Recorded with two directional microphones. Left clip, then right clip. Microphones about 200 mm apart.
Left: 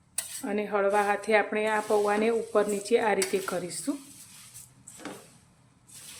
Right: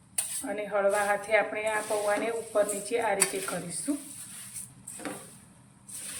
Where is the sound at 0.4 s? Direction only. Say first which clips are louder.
Left 1 dB; 55° left (ahead or behind).